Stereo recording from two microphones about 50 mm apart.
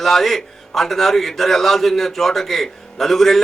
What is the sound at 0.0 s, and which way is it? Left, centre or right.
A man's voice, centre.